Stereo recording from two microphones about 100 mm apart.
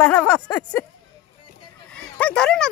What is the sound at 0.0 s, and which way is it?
Speech, 15° left (ahead or behind).